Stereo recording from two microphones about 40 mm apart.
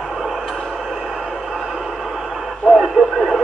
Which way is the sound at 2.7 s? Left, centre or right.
Right.